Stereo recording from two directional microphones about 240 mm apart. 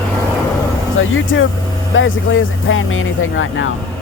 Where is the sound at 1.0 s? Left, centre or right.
Left.